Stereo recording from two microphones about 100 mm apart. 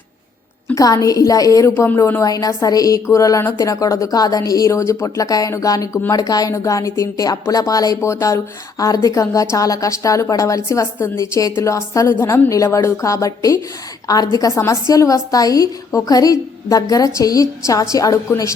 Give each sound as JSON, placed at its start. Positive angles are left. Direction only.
{"t": 0.7, "sound": "a woman's voice", "side_deg": 35}
{"t": 2.2, "sound": "a woman's voice", "side_deg": 35}